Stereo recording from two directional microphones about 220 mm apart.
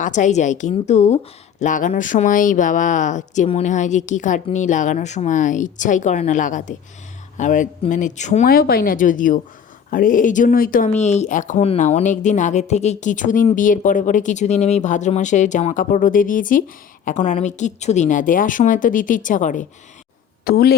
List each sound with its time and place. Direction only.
0.0 s a woman's voice: 35° left (ahead or behind)